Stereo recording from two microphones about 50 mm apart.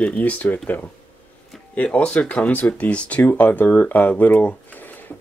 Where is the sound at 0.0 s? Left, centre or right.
Left.